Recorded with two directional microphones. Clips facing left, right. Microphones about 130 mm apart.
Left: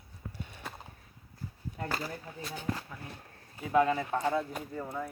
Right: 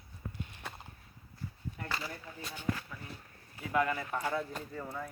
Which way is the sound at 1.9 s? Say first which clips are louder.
Left 3 dB; 45° left (ahead or behind).